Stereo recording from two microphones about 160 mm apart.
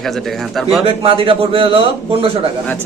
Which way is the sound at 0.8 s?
35° right (ahead or behind).